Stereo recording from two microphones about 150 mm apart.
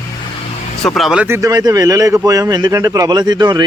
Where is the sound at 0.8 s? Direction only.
Centre (ahead or behind).